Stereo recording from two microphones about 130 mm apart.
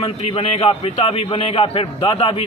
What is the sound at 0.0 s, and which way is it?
A man's voice, 45° left (ahead or behind).